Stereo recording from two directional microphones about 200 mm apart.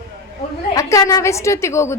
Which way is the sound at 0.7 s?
15° left (ahead or behind).